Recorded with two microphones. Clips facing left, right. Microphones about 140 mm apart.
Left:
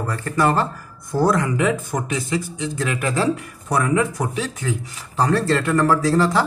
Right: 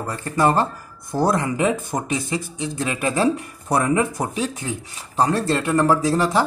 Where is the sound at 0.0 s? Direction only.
20° right (ahead or behind).